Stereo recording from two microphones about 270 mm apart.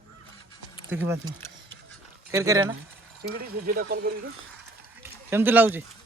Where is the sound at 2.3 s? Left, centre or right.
Centre.